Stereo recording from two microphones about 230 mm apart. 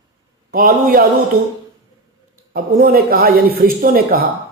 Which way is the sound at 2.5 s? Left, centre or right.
Right.